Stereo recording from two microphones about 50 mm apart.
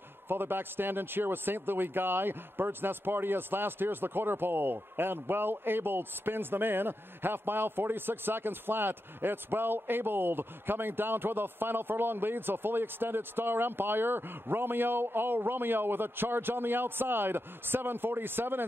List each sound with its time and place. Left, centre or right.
0.3 s a man's voice: right